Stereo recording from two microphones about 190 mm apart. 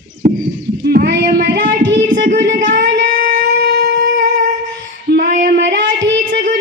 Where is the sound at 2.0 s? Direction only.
40° right (ahead or behind).